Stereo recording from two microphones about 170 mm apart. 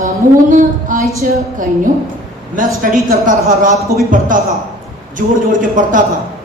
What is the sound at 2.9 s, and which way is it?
Speech, 55° right (ahead or behind).